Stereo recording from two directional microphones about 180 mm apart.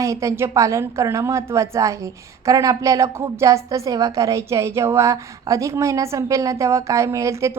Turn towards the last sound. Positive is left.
turn(degrees=-15)  # may be behind; listen again after turning